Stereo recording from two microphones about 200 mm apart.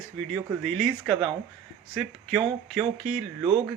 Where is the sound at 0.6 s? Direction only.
5° left (ahead or behind).